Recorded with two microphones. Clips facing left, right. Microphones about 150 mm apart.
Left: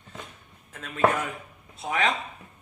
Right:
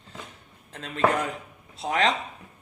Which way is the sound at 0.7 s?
30° right (ahead or behind).